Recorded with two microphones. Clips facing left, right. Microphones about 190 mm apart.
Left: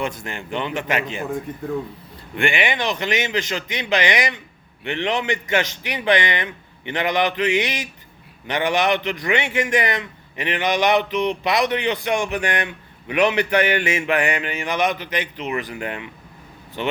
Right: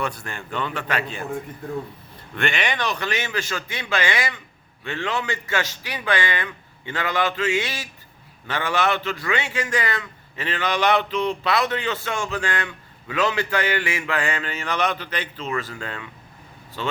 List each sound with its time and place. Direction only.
0.0 s a man's voice: 15° left (ahead or behind)
2.3 s a man's voice: 15° left (ahead or behind)